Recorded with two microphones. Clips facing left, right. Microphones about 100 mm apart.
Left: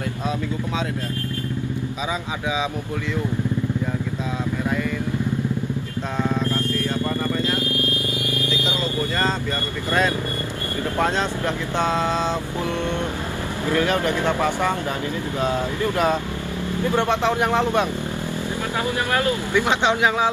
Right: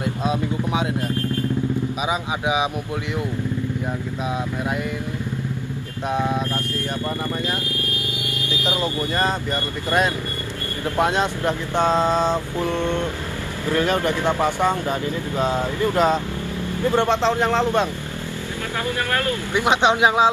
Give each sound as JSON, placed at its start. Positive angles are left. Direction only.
{"t": 0.2, "sound": "vehicle", "side_deg": -15}
{"t": 9.8, "sound": "speech", "side_deg": -15}
{"t": 12.5, "sound": "speech", "side_deg": 15}
{"t": 13.7, "sound": "speech", "side_deg": -15}
{"t": 17.1, "sound": "speech", "side_deg": 15}
{"t": 19.5, "sound": "speech", "side_deg": -20}